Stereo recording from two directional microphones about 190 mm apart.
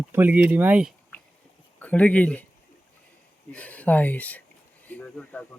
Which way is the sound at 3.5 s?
5° left (ahead or behind).